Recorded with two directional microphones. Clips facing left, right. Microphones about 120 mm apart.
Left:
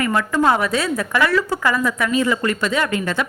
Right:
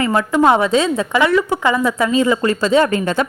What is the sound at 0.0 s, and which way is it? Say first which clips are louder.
A woman's voice: right 4 dB; 25° right (ahead or behind).